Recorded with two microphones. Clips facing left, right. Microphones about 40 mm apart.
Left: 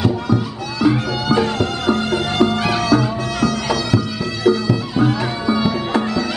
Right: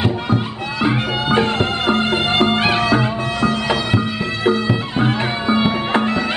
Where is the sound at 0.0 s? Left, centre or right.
Right.